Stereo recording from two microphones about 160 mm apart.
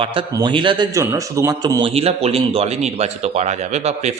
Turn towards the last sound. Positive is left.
turn(degrees=-45)  # may be behind; listen again after turning